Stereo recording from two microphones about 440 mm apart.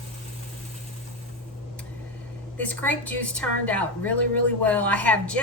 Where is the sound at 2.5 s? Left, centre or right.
Centre.